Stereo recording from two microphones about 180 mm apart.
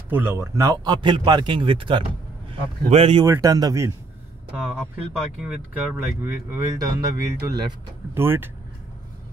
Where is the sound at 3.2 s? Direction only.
20° right (ahead or behind).